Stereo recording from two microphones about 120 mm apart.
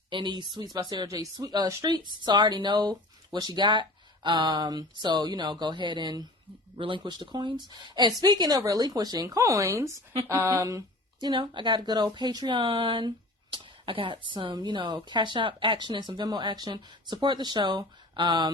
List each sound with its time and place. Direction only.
0.1 s speech: 40° right (ahead or behind)
11.3 s speech: 40° right (ahead or behind)